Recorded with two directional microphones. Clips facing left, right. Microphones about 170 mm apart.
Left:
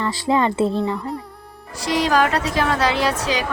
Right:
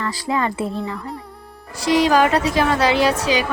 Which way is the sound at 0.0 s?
25° left (ahead or behind).